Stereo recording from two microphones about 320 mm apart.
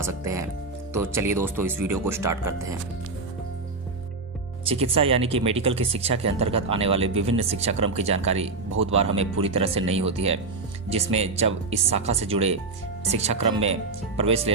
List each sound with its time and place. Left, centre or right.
0.0 s speech: centre
4.6 s speech: centre